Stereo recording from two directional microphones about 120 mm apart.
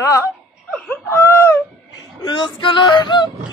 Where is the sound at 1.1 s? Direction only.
20° left (ahead or behind).